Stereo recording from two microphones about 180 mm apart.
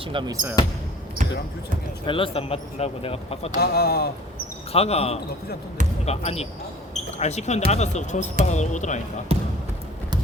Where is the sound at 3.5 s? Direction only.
60° left (ahead or behind).